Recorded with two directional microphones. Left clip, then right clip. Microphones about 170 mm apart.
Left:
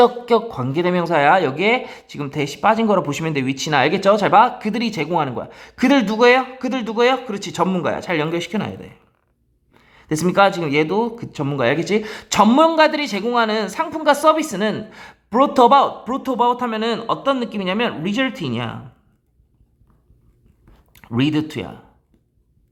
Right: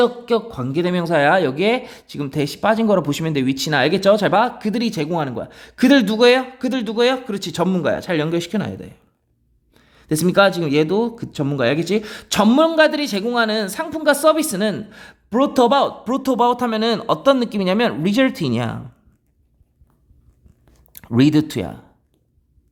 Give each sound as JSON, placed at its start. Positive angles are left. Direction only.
{"t": 0.0, "sound": "speech", "side_deg": -15}
{"t": 20.9, "sound": "speech", "side_deg": -40}